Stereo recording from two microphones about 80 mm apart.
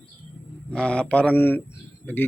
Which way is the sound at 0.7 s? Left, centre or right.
Centre.